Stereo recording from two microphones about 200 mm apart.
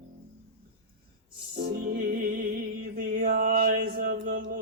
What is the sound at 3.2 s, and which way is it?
Mantra, 45° right (ahead or behind).